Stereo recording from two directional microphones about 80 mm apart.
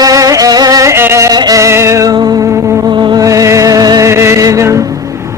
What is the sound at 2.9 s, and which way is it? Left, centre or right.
Music, right.